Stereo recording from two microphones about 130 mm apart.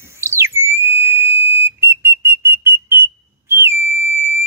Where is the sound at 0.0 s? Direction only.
20° right (ahead or behind).